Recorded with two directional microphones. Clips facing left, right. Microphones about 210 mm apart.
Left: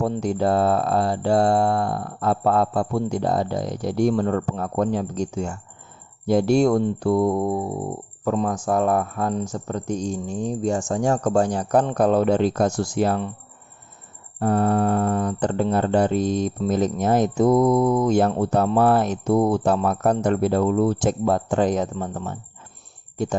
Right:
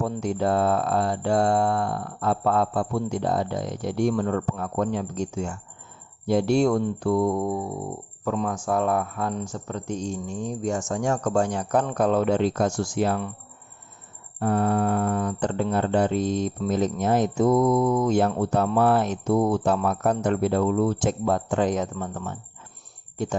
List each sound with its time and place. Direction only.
0.0 s speech: 35° left (ahead or behind)
14.3 s speech: 40° left (ahead or behind)